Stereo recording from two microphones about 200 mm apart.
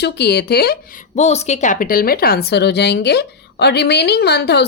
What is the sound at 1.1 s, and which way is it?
A woman's voice, 35° left (ahead or behind).